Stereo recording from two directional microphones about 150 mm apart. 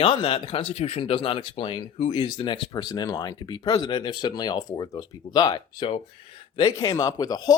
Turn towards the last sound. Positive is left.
turn(degrees=25)  # may be behind; listen again after turning